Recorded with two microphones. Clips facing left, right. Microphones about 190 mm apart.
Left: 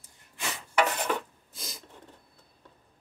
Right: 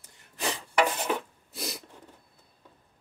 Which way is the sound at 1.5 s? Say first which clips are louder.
Right 9 dB; 70° right (ahead or behind).